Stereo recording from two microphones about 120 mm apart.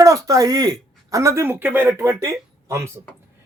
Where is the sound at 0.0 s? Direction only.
30° right (ahead or behind).